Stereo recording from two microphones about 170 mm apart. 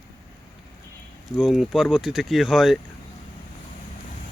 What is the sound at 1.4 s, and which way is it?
Speech, centre (ahead or behind).